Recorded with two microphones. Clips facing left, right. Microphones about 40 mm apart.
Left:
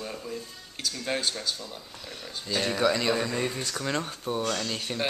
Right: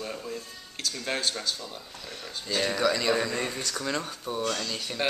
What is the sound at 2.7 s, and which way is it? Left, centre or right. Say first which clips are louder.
Speech: left 2 dB; centre.